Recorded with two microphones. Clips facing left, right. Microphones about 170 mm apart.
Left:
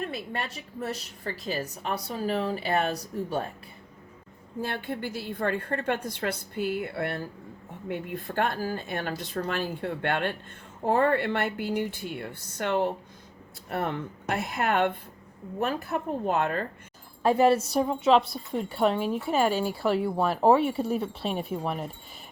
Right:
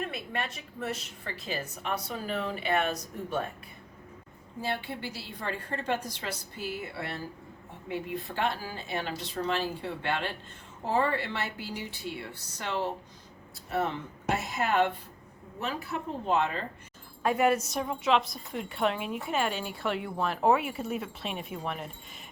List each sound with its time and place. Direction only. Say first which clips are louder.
0.1 s a woman's voice: left 2 dB; 35° left (ahead or behind)
4.6 s a woman's voice: left 2 dB; 50° left (ahead or behind)
17.2 s a woman's voice: left 4 dB; 30° left (ahead or behind)